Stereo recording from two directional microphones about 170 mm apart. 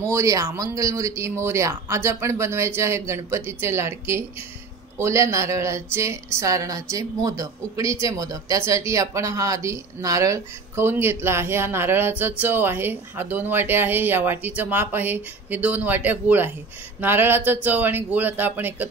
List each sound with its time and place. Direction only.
0.1 s a woman's voice: 20° right (ahead or behind)